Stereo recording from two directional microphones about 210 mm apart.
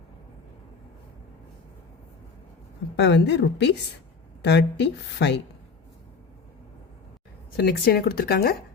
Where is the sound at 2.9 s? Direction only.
55° left (ahead or behind).